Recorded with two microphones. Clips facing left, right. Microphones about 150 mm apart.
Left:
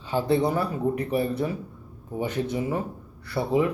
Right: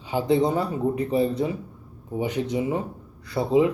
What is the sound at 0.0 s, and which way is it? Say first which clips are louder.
Speech: right 2 dB; 15° right (ahead or behind).